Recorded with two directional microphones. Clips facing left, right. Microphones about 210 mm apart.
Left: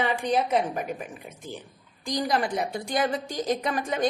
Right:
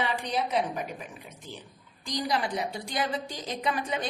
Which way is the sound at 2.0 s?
50° left (ahead or behind).